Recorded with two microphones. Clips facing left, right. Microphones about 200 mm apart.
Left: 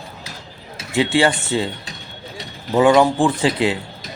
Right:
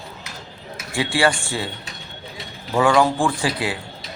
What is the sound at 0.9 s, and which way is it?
Speech, 20° left (ahead or behind).